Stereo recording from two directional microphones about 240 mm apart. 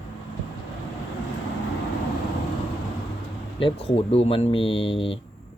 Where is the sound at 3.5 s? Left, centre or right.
Left.